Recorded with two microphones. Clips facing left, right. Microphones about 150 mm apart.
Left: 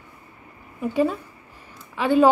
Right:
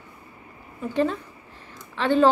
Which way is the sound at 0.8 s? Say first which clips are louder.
Left 2 dB; 10° left (ahead or behind).